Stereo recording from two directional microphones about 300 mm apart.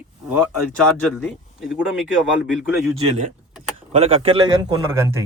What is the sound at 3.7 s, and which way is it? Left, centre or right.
Speech, centre.